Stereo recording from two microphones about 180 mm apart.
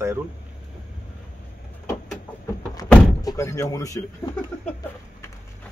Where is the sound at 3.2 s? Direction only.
20° left (ahead or behind).